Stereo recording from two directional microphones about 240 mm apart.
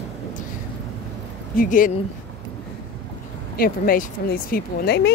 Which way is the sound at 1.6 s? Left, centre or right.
Left.